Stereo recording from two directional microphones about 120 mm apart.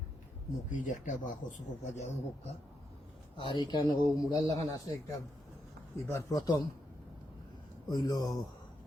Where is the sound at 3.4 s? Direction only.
40° left (ahead or behind).